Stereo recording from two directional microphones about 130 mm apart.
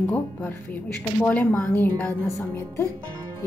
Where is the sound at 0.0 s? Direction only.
20° left (ahead or behind).